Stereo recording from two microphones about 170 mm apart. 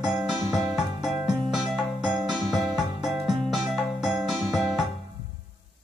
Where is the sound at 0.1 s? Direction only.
Centre (ahead or behind).